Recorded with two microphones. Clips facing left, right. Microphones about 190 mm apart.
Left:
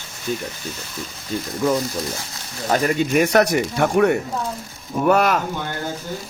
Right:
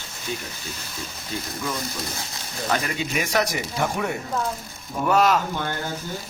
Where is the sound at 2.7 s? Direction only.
45° left (ahead or behind).